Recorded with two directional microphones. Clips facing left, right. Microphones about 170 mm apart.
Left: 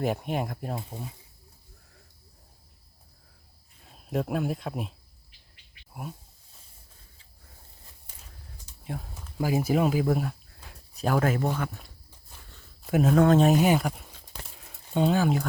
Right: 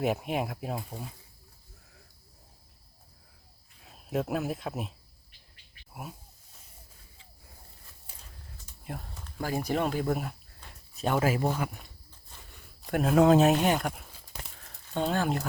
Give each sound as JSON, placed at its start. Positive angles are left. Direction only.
{"t": 0.0, "sound": "speech", "side_deg": 0}
{"t": 3.8, "sound": "speech", "side_deg": 0}
{"t": 8.8, "sound": "speech", "side_deg": 0}
{"t": 12.4, "sound": "a sound", "side_deg": -15}
{"t": 12.8, "sound": "speech", "side_deg": 0}
{"t": 14.5, "sound": "a sound", "side_deg": 10}